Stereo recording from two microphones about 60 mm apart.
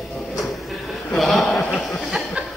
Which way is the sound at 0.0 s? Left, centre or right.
Centre.